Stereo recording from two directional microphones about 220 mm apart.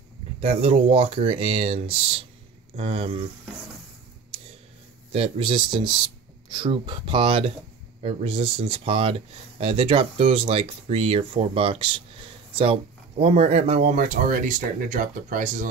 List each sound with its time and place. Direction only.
0.4 s speech: 25° right (ahead or behind)
5.1 s speech: 25° right (ahead or behind)
13.2 s speech: 25° right (ahead or behind)